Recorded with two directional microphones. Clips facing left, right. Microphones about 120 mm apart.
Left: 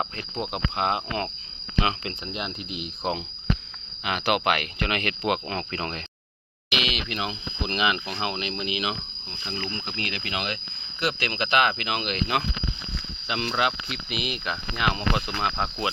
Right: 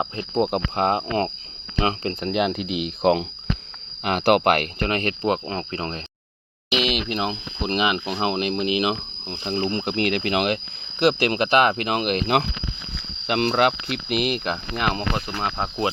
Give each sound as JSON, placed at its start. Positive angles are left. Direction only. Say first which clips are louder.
{"t": 0.3, "sound": "speech", "louder": "right 7 dB", "side_deg": -40}
{"t": 2.2, "sound": "speech", "louder": "right 13 dB", "side_deg": -70}
{"t": 4.0, "sound": "speech", "louder": "right 6 dB", "side_deg": -45}
{"t": 7.1, "sound": "speech", "louder": "right 5 dB", "side_deg": -30}
{"t": 8.4, "sound": "speech", "louder": "right 7 dB", "side_deg": -45}
{"t": 15.3, "sound": "speech", "louder": "right 1 dB", "side_deg": -15}